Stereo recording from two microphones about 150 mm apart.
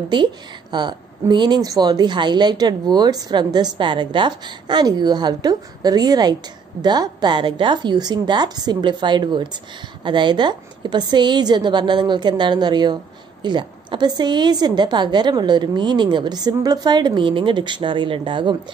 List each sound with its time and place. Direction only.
0.1 s a woman's voice: 30° right (ahead or behind)